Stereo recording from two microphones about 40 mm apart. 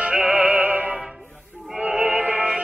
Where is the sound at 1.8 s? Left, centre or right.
Right.